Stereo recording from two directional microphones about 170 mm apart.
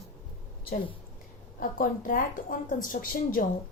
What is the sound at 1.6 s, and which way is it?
A woman's voice, 50° left (ahead or behind).